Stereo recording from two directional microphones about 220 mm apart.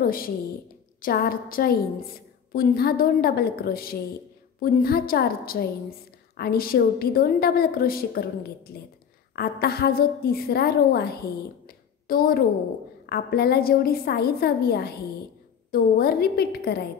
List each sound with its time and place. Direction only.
0.0 s a woman's voice: 40° left (ahead or behind)
9.3 s a woman's voice: 45° left (ahead or behind)
11.6 s a sound: 40° left (ahead or behind)
13.0 s a woman's voice: 45° left (ahead or behind)